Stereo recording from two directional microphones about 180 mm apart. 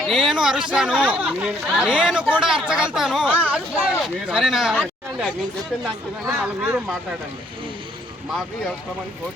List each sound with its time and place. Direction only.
0.1 s speech: 5° right (ahead or behind)